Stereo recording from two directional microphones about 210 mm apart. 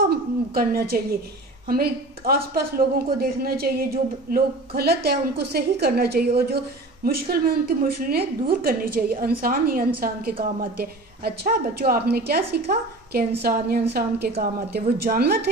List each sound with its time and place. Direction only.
0.1 s a woman's voice: 45° right (ahead or behind)